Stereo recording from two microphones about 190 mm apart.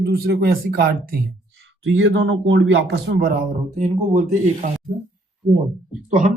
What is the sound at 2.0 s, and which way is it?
A man's voice, 70° right (ahead or behind).